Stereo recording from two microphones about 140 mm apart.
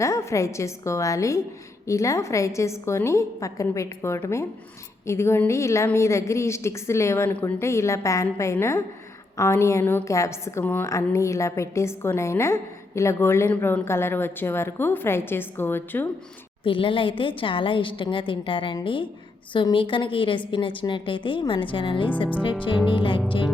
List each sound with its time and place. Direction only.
0.0 s a woman's voice: 20° left (ahead or behind)
16.6 s a woman's voice: 40° left (ahead or behind)